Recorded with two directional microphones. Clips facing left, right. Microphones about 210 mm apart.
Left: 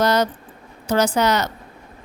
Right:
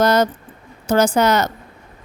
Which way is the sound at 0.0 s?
50° right (ahead or behind).